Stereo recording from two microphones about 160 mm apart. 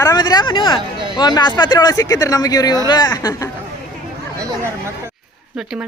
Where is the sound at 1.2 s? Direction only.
25° left (ahead or behind).